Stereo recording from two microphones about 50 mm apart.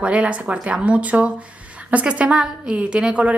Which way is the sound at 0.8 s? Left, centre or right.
Right.